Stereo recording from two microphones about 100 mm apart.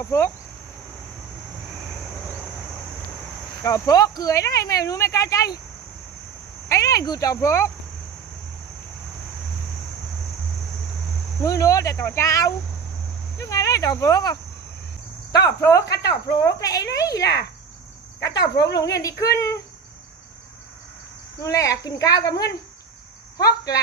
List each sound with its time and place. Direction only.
0.0 s speech: 25° left (ahead or behind)
3.6 s speech: 35° left (ahead or behind)
6.7 s speech: 35° left (ahead or behind)
11.4 s speech: 35° left (ahead or behind)
21.4 s speech: 35° left (ahead or behind)